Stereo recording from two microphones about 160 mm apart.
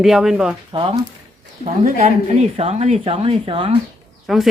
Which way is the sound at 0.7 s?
30° right (ahead or behind).